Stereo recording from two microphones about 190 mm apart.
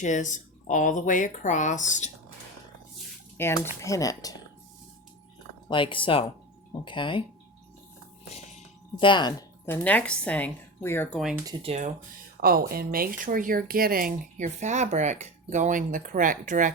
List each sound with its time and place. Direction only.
0.0 s speech: 40° left (ahead or behind)
3.3 s speech: 10° left (ahead or behind)
5.6 s speech: 25° left (ahead or behind)
8.3 s music: 35° left (ahead or behind)
9.6 s speech: 10° left (ahead or behind)
11.6 s speech: 35° right (ahead or behind)
12.4 s speech: 50° right (ahead or behind)